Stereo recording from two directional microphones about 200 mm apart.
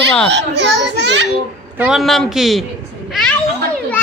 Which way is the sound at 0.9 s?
60° right (ahead or behind).